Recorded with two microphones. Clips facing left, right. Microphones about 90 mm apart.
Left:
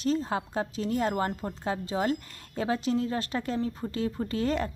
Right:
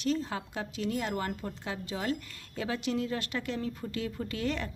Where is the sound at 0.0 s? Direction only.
35° left (ahead or behind).